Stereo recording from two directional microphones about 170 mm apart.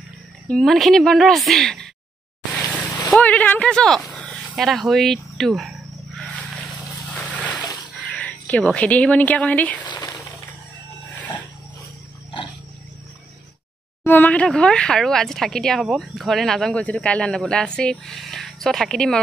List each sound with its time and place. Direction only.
0.5 s speech: centre (ahead or behind)
3.1 s speech: 10° left (ahead or behind)
8.1 s speech: 10° left (ahead or behind)
9.8 s a sound: 25° left (ahead or behind)
14.0 s speech: 10° left (ahead or behind)